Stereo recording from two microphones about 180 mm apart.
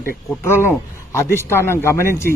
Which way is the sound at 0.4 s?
15° left (ahead or behind).